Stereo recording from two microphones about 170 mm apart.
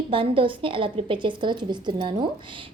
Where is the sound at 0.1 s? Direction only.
30° right (ahead or behind).